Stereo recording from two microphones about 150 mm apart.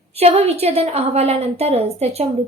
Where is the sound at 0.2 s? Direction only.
45° right (ahead or behind).